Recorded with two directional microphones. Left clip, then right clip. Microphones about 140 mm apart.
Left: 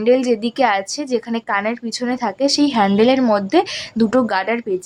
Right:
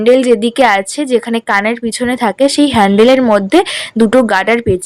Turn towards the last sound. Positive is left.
turn(degrees=-40)  # may be behind; listen again after turning